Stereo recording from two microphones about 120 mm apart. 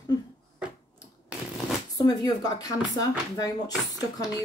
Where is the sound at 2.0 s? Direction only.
35° left (ahead or behind).